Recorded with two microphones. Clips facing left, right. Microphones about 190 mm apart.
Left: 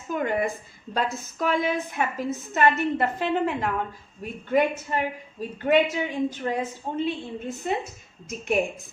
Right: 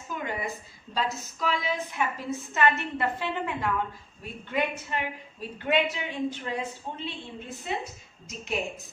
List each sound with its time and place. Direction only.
0.1 s a woman's voice: 50° left (ahead or behind)
2.5 s a woman's voice: 40° left (ahead or behind)